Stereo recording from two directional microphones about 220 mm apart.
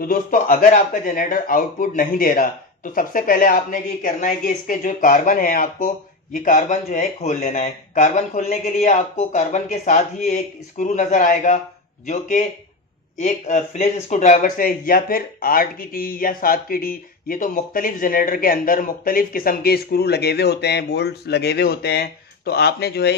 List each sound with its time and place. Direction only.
0.0 s speech: 40° left (ahead or behind)